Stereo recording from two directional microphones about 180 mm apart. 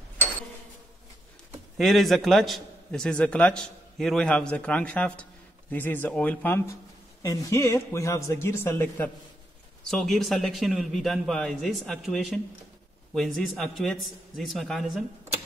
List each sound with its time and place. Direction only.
1.8 s a man's voice: centre (ahead or behind)